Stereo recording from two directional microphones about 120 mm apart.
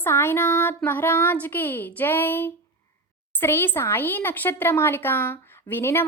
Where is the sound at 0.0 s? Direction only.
20° left (ahead or behind).